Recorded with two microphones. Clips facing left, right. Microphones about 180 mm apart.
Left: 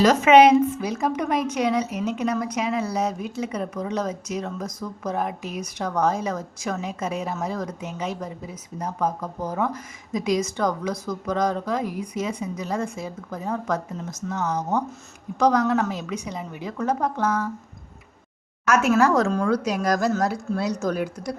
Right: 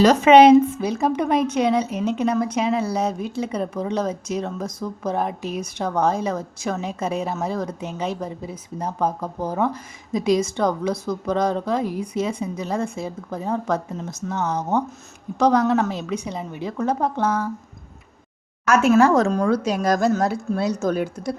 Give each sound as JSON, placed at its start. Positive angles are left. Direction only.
{"t": 0.0, "sound": "a woman's voice", "side_deg": -30}
{"t": 18.7, "sound": "a woman's voice", "side_deg": -25}